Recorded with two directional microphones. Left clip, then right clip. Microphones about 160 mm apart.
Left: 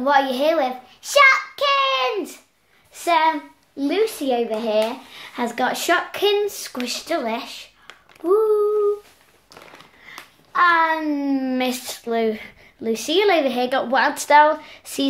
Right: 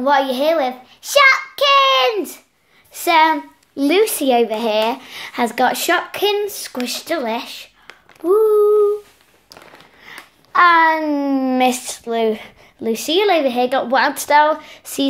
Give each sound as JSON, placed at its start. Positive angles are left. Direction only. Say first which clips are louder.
{"t": 0.0, "sound": "speech", "louder": "right 2 dB", "side_deg": -25}
{"t": 3.7, "sound": "speech", "louder": "right 6 dB", "side_deg": -70}
{"t": 10.1, "sound": "a sound", "louder": "right 3 dB", "side_deg": -60}
{"t": 10.5, "sound": "speech", "louder": "right 5 dB", "side_deg": -55}
{"t": 11.0, "sound": "speech", "louder": "right 4 dB", "side_deg": -30}